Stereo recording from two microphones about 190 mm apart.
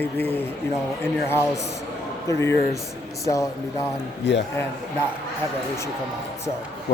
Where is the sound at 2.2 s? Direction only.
15° left (ahead or behind).